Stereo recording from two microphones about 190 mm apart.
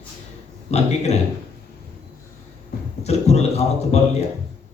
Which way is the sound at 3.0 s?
35° left (ahead or behind).